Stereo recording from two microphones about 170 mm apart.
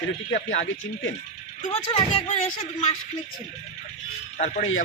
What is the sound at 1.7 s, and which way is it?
Speech, 35° left (ahead or behind).